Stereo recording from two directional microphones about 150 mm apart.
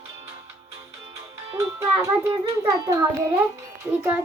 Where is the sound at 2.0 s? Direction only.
20° right (ahead or behind).